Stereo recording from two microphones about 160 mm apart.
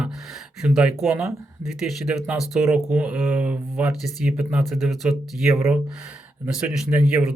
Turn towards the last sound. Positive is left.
turn(degrees=-5)  # may be behind; listen again after turning